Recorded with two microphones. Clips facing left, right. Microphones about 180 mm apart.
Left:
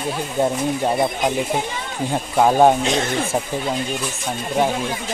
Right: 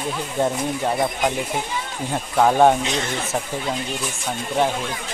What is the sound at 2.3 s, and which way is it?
Speech, 10° left (ahead or behind).